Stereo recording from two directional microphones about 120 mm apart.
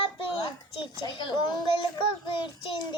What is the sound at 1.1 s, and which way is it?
Speech, 40° left (ahead or behind).